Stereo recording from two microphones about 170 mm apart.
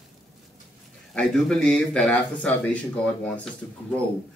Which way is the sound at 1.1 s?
5° left (ahead or behind).